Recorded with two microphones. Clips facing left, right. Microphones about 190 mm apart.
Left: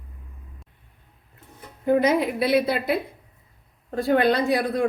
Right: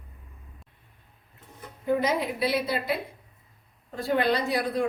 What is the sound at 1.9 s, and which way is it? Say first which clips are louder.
A woman's voice: left 6 dB; 55° left (ahead or behind).